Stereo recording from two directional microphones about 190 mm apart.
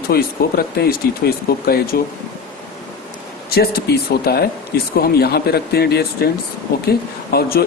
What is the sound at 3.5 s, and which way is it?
Speech, 55° left (ahead or behind).